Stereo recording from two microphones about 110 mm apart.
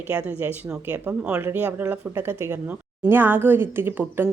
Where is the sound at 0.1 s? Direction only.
15° right (ahead or behind).